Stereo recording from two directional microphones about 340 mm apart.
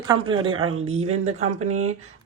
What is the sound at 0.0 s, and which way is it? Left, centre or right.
Speech, centre.